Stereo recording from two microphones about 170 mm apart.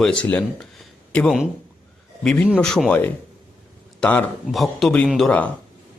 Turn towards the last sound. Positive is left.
turn(degrees=5)  # may be behind; listen again after turning